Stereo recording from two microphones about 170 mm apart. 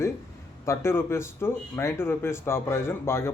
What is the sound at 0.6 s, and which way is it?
Speech, 15° left (ahead or behind).